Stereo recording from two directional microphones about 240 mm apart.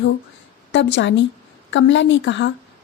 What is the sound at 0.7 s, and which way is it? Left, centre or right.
A woman's voice, left.